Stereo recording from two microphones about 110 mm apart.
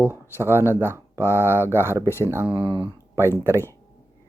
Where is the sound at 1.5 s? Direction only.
20° right (ahead or behind).